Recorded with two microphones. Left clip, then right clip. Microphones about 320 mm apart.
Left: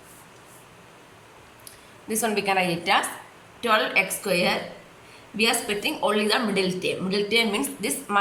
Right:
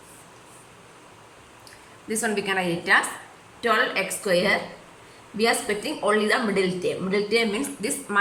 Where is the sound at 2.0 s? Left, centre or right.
Centre.